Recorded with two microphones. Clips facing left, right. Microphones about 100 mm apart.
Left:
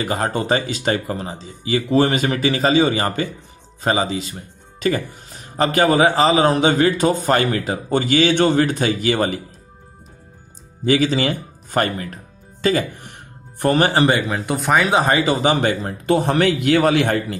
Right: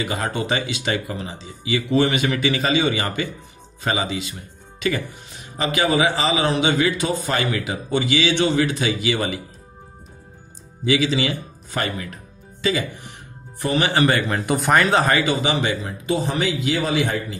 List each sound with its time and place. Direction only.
0.0 s speech: 40° left (ahead or behind)
10.9 s speech: 45° left (ahead or behind)
14.2 s speech: centre (ahead or behind)
14.9 s speech: 20° left (ahead or behind)
15.2 s a man's voice: 40° left (ahead or behind); by 17.4 s 60° left (ahead or behind)